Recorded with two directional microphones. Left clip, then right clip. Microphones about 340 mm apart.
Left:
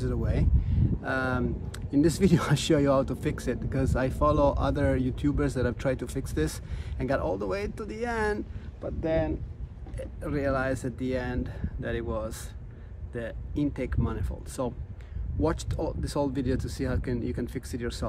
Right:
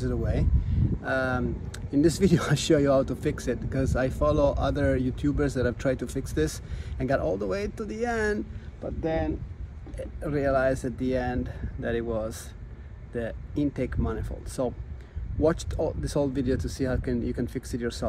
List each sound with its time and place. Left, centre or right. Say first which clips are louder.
0.0 s speech: right 2 dB; centre